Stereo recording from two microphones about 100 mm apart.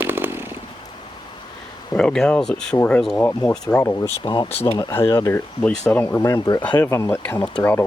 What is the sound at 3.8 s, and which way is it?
Speech, 30° left (ahead or behind).